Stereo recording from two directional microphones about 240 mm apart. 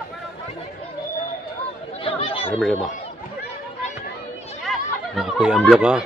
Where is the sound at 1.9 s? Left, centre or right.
Left.